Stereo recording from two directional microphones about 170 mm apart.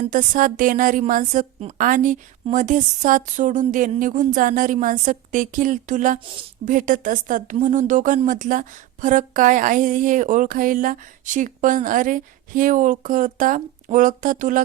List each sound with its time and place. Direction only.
0.1 s speech: 50° right (ahead or behind)